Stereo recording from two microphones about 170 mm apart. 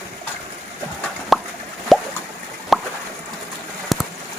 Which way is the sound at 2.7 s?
Centre (ahead or behind).